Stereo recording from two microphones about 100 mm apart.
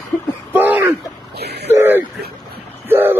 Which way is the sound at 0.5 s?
20° right (ahead or behind).